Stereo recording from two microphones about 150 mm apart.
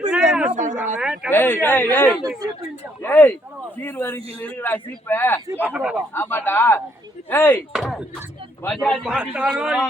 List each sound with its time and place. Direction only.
0.1 s a sound: 5° right (ahead or behind)
0.5 s speech: 55° right (ahead or behind)
0.9 s speech: 5° right (ahead or behind)
1.3 s a man's voice: 15° left (ahead or behind)
5.7 s speech: 5° right (ahead or behind)
6.1 s a man's voice: 15° left (ahead or behind)
7.7 s speech: centre (ahead or behind)